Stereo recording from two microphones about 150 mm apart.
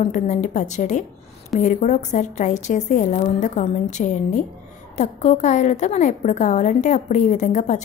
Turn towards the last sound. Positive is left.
turn(degrees=50)  # may be behind; listen again after turning